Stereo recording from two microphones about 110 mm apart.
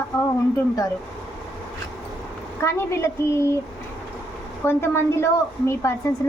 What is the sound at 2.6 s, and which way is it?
Speech, 25° left (ahead or behind).